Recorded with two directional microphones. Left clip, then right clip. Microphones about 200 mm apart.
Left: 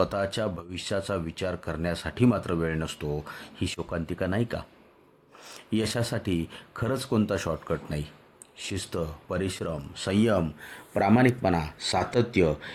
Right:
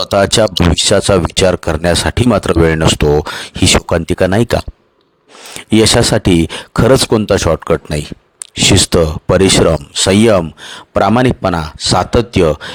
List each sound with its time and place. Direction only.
0.0 s speech: 50° right (ahead or behind)